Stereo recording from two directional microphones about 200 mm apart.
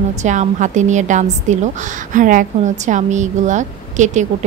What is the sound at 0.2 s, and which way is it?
A woman's voice, 35° right (ahead or behind).